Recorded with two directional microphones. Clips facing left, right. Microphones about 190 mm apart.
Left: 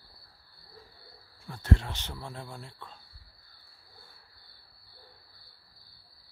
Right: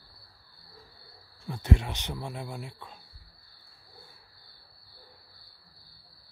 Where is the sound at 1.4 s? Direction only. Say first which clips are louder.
Right 1 dB; 15° right (ahead or behind).